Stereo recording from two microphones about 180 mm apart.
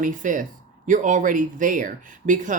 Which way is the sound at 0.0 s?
45° right (ahead or behind).